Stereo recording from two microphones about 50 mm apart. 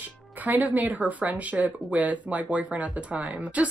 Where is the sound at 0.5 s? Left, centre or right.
Right.